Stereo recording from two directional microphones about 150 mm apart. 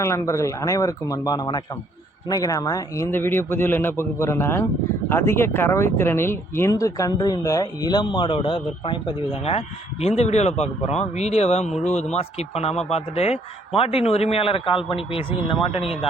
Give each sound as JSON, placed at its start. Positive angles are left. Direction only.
{"t": 0.0, "sound": "a man's voice", "side_deg": 20}